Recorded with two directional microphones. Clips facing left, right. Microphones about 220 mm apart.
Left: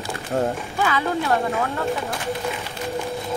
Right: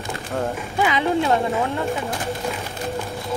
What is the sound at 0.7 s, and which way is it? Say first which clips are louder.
Speech: right 5 dB; 20° right (ahead or behind).